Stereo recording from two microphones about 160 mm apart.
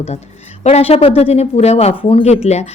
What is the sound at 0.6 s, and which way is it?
Speech, 40° left (ahead or behind).